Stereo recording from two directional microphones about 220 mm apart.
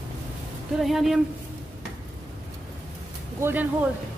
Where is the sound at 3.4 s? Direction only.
10° right (ahead or behind).